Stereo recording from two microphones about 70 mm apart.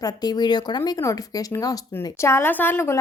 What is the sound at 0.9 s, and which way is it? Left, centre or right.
Speech, left.